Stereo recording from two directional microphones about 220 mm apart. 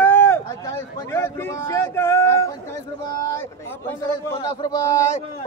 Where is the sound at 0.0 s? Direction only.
10° left (ahead or behind).